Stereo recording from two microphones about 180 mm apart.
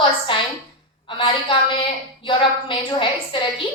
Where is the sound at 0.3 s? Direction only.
30° left (ahead or behind).